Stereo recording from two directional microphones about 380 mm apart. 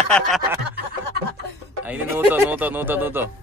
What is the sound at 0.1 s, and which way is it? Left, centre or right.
Speech, centre.